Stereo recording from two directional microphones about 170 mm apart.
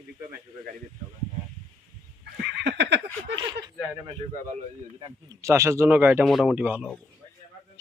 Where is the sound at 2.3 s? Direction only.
90° right.